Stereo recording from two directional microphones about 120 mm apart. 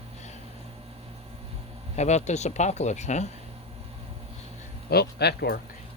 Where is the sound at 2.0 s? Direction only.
70° left (ahead or behind).